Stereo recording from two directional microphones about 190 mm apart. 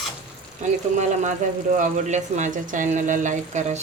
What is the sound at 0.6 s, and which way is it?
Speech, 40° right (ahead or behind).